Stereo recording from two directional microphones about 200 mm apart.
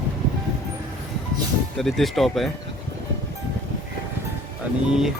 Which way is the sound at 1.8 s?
Centre (ahead or behind).